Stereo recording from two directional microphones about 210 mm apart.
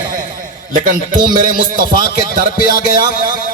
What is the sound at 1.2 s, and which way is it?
Music, 40° right (ahead or behind).